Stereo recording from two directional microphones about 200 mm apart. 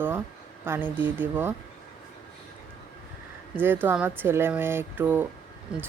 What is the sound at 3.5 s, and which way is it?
A child's voice, 10° right (ahead or behind).